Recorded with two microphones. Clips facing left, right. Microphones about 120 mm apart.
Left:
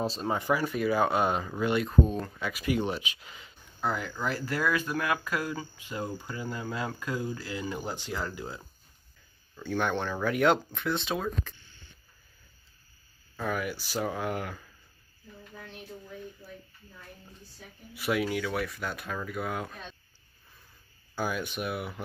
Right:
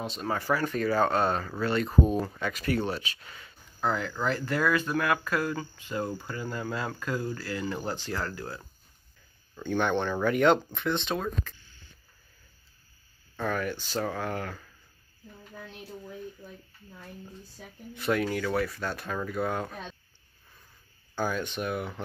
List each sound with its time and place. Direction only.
0.0 s speech: 35° left (ahead or behind)
0.3 s speech: 15° left (ahead or behind)
1.9 s speech: 5° right (ahead or behind)
2.4 s speech: 10° left (ahead or behind)
9.6 s speech: 5° left (ahead or behind)
13.4 s speech: 10° left (ahead or behind)
17.9 s speech: 5° left (ahead or behind)
21.1 s speech: 10° left (ahead or behind)